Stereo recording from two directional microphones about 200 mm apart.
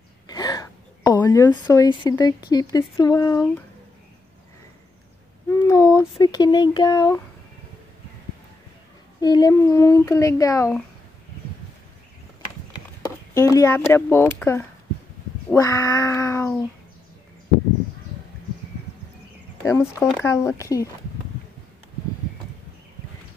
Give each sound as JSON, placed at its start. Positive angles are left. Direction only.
{"t": 0.3, "sound": "a sound", "side_deg": 20}
{"t": 1.1, "sound": "speech", "side_deg": 15}
{"t": 5.7, "sound": "speech", "side_deg": 15}
{"t": 9.2, "sound": "speech", "side_deg": 20}
{"t": 13.0, "sound": "speech", "side_deg": 15}
{"t": 19.6, "sound": "speech", "side_deg": 15}
{"t": 19.9, "sound": "speech", "side_deg": -5}
{"t": 20.2, "sound": "speech", "side_deg": 15}